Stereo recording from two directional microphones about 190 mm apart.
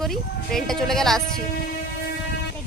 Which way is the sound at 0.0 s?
Centre (ahead or behind).